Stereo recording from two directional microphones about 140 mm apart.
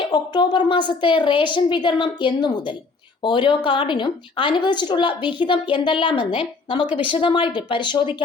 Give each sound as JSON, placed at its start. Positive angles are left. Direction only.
{"t": 0.0, "sound": "speech", "side_deg": 30}